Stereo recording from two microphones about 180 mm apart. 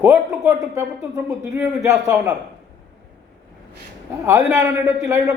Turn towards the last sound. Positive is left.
turn(degrees=-15)  # may be behind; listen again after turning